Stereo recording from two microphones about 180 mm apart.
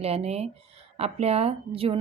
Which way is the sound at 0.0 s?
35° right (ahead or behind).